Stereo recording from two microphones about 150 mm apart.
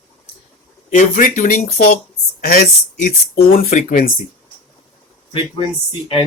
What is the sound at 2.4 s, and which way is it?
Speech, 80° left.